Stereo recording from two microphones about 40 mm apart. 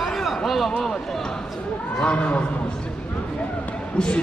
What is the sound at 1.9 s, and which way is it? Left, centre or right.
Speech, left.